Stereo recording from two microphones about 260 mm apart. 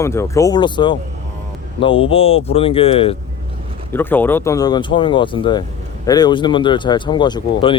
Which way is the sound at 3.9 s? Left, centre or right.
Centre.